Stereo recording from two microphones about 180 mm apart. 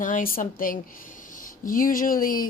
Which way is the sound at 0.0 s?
50° left (ahead or behind).